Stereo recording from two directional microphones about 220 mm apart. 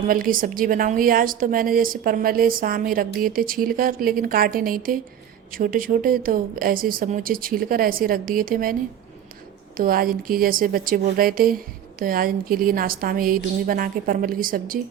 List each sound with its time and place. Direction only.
0.1 s speech: 40° right (ahead or behind)
9.7 s speech: 40° right (ahead or behind)